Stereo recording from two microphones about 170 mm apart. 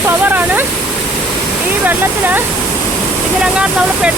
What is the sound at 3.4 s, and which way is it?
Speech, 5° right (ahead or behind).